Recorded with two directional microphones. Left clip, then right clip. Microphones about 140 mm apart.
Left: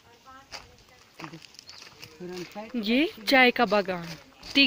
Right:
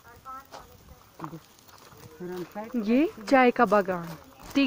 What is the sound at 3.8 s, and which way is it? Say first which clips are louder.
Speech: right 1 dB; 20° left (ahead or behind).